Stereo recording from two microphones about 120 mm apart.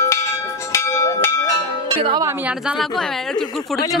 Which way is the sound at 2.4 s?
5° right (ahead or behind).